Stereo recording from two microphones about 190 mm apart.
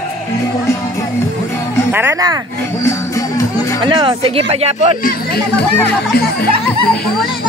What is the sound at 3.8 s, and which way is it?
Speech, 25° right (ahead or behind).